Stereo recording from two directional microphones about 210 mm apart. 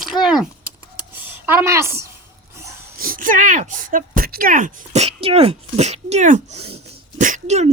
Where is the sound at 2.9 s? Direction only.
40° right (ahead or behind).